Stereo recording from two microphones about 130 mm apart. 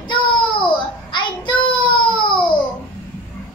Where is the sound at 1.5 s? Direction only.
40° left (ahead or behind).